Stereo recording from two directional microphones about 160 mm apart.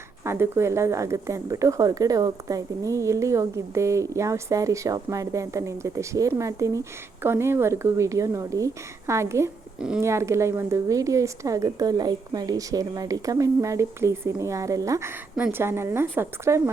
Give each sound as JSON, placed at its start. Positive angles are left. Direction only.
{"t": 0.3, "sound": "a woman's voice", "side_deg": -15}